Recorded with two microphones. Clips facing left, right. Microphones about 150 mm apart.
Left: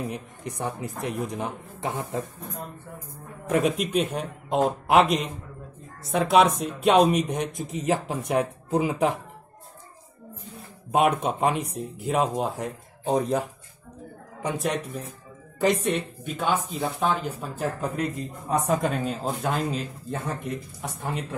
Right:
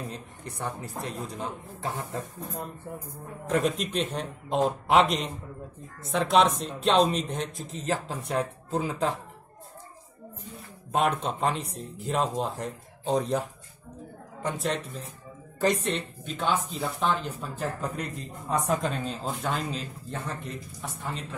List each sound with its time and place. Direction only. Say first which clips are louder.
0.1 s speech: left 5 dB; 15° left (ahead or behind)
3.4 s speech: left 3 dB; 5° left (ahead or behind)
10.9 s speech: left 4 dB; 15° left (ahead or behind)
15.6 s speech: left 3 dB; 15° left (ahead or behind)